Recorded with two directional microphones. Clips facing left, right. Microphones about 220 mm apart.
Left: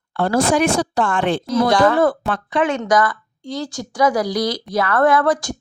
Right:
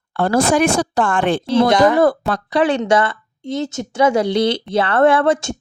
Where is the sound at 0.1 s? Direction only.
50° right (ahead or behind).